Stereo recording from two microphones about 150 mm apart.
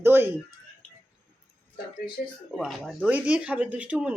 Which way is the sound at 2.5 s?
5° right (ahead or behind).